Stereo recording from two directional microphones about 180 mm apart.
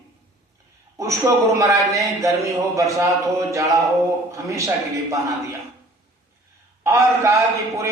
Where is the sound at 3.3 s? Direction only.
15° right (ahead or behind).